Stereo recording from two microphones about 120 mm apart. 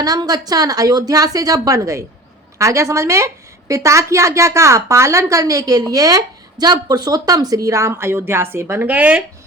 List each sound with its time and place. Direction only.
0.0 s a woman's voice: 30° right (ahead or behind); by 9.2 s 10° right (ahead or behind)